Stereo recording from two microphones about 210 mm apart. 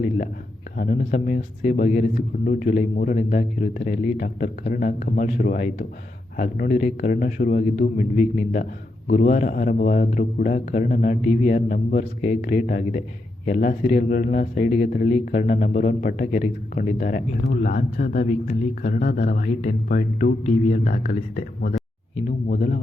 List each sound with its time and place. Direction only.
0.8 s a man's voice: 40° left (ahead or behind)